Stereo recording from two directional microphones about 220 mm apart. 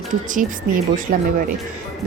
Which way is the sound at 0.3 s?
35° right (ahead or behind).